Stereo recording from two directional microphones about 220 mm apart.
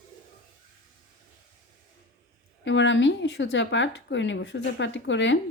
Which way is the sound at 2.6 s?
55° left (ahead or behind).